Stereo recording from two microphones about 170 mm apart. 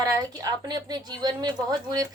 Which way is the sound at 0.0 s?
20° right (ahead or behind).